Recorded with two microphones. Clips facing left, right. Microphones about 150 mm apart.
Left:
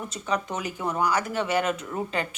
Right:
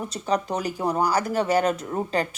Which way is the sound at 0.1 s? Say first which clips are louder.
Right 4 dB; 35° right (ahead or behind).